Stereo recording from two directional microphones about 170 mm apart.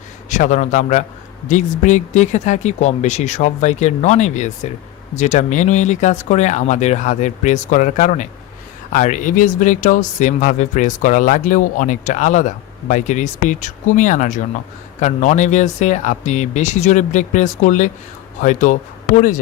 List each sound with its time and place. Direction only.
0.3 s speech: 45° left (ahead or behind)